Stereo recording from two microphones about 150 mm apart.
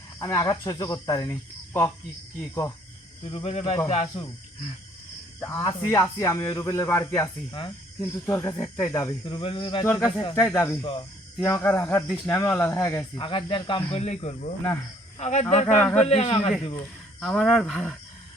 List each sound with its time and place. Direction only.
0.2 s speech: 25° left (ahead or behind)
3.2 s speech: 40° left (ahead or behind)
5.4 s speech: 20° left (ahead or behind)
9.2 s speech: 35° left (ahead or behind)
9.8 s speech: 20° left (ahead or behind)
13.1 s a man's voice: 35° left (ahead or behind)
15.8 s speech: 5° left (ahead or behind)
16.0 s a man's voice: 45° left (ahead or behind)
17.2 s speech: centre (ahead or behind)